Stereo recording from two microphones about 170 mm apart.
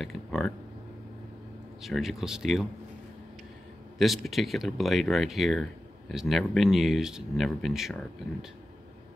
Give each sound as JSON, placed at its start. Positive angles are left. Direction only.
{"t": 0.0, "sound": "speech", "side_deg": 0}
{"t": 1.8, "sound": "speech", "side_deg": 0}
{"t": 4.0, "sound": "speech", "side_deg": 0}